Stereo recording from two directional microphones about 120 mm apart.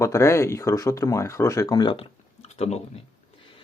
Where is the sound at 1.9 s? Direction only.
60° left (ahead or behind).